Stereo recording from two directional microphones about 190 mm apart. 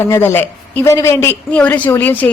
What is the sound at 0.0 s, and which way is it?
A woman's voice, 15° left (ahead or behind).